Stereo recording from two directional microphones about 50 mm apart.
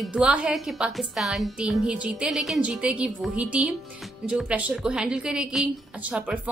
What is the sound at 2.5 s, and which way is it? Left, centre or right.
Speech, right.